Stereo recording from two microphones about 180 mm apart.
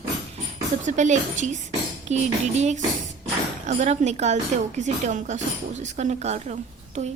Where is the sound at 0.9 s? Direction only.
40° right (ahead or behind).